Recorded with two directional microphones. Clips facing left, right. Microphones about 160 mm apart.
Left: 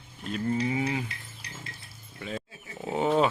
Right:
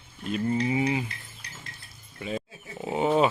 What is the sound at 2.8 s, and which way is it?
Bird, 10° right (ahead or behind).